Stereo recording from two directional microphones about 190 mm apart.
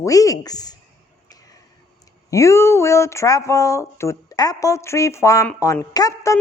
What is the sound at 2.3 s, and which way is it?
A woman's voice, 15° left (ahead or behind).